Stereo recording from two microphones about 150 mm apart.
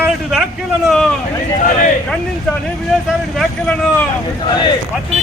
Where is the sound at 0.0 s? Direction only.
5° right (ahead or behind).